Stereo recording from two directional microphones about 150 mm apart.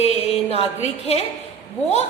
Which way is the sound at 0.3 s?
40° left (ahead or behind).